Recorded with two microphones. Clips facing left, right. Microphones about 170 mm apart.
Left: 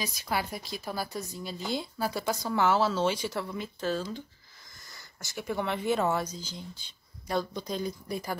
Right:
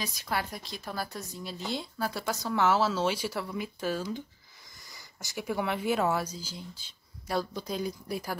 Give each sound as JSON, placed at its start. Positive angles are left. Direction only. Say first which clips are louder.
{"t": 0.0, "sound": "speech", "louder": "left 1 dB", "side_deg": 0}
{"t": 4.8, "sound": "a sound", "louder": "even", "side_deg": -15}
{"t": 5.5, "sound": "speech", "louder": "even", "side_deg": -5}